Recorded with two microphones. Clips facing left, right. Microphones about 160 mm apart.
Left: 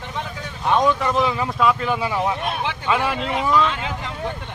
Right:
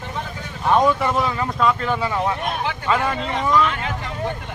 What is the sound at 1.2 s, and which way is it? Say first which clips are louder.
Speech: left 1 dB; 5° left (ahead or behind).